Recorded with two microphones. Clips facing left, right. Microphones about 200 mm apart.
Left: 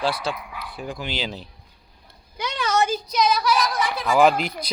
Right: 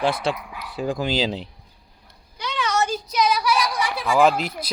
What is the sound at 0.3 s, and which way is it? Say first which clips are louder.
Speech: right 4 dB; 90° right.